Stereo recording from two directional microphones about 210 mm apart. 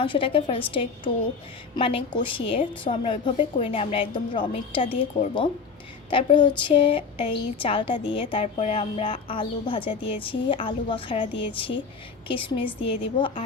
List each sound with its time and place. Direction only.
0.0 s speech: 25° left (ahead or behind)
12.3 s speech: 25° left (ahead or behind)